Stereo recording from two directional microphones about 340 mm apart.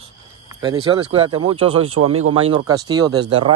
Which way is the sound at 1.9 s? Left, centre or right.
Right.